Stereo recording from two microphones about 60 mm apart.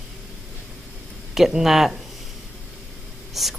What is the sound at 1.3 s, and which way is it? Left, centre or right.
Speech, centre.